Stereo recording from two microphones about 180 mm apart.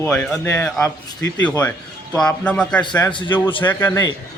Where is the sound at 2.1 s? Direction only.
5° left (ahead or behind).